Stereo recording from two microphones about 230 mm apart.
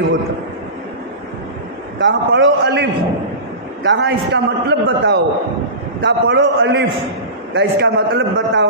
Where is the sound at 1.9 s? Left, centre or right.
Right.